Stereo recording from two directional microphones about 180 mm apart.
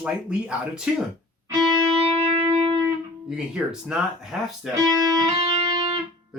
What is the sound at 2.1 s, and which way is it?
Music, 35° right (ahead or behind).